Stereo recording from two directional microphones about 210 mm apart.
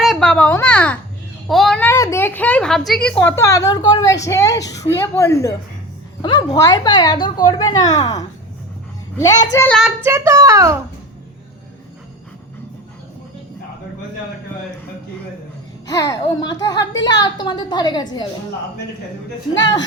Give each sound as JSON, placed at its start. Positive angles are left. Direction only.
{"t": 0.0, "sound": "a sound", "side_deg": 0}
{"t": 1.5, "sound": "a woman's voice", "side_deg": 0}
{"t": 10.0, "sound": "a child's voice", "side_deg": -10}
{"t": 15.9, "sound": "a woman's voice", "side_deg": 15}